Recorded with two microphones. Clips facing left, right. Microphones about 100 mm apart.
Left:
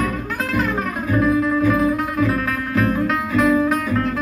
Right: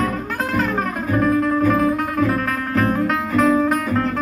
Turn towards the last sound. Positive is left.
turn(degrees=-40)  # may be behind; listen again after turning